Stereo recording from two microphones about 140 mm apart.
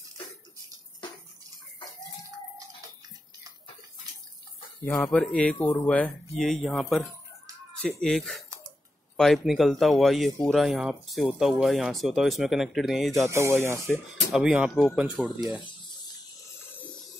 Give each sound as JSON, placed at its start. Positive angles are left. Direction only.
{"t": 4.9, "sound": "speech", "side_deg": 5}
{"t": 13.3, "sound": "speech", "side_deg": -20}
{"t": 13.8, "sound": "speech", "side_deg": 0}